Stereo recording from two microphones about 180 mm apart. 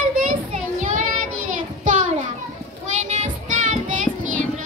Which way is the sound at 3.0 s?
40° right (ahead or behind).